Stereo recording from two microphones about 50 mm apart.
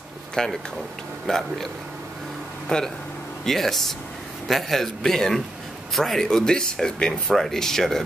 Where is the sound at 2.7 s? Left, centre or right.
Centre.